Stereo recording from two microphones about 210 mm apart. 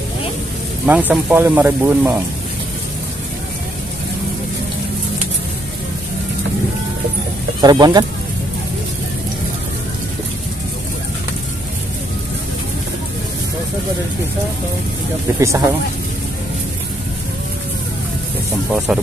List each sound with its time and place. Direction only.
0.8 s speech: 5° right (ahead or behind)
7.6 s speech: 20° right (ahead or behind)
15.3 s speech: 15° right (ahead or behind)
18.9 s speech: 5° right (ahead or behind)